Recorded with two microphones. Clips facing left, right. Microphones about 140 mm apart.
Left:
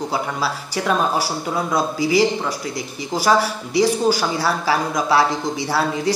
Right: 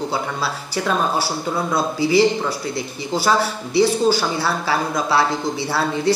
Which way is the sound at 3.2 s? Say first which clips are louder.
Left 1 dB; 15° left (ahead or behind).